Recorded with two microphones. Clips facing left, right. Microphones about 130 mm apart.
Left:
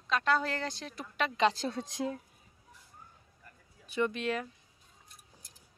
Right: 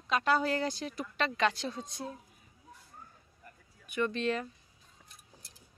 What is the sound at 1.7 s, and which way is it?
Speech, 85° left.